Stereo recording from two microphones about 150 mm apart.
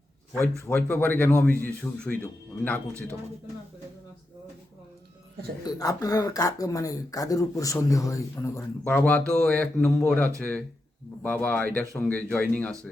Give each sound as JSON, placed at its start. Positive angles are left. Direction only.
{"t": 0.6, "sound": "speech", "side_deg": 10}
{"t": 5.6, "sound": "speech", "side_deg": 25}